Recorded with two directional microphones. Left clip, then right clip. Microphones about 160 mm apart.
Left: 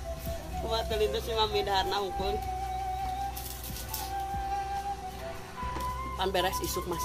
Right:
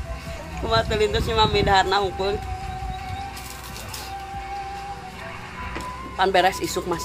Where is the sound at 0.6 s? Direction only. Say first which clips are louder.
Right 9 dB; 30° right (ahead or behind).